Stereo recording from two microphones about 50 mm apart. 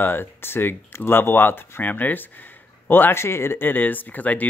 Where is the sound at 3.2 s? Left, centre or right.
Left.